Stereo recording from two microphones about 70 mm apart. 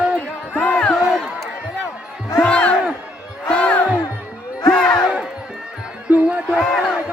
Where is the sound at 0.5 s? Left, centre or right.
Left.